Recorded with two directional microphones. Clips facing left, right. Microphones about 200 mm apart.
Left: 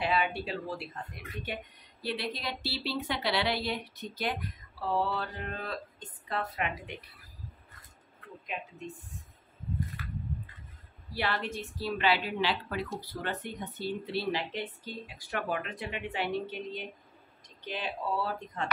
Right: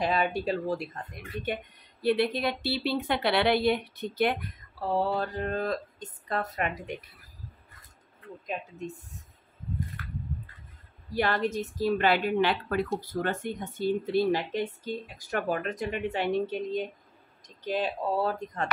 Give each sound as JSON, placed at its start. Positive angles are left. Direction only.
{"t": 0.0, "sound": "speech", "side_deg": -40}
{"t": 4.9, "sound": "speech", "side_deg": -40}
{"t": 8.5, "sound": "speech", "side_deg": -40}
{"t": 11.1, "sound": "speech", "side_deg": -45}
{"t": 17.6, "sound": "speech", "side_deg": -45}